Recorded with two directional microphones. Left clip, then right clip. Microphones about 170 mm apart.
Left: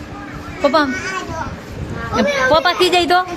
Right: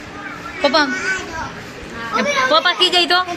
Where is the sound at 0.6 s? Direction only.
25° left (ahead or behind).